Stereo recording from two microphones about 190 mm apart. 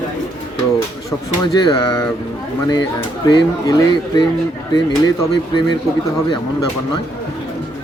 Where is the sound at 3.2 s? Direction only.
20° left (ahead or behind).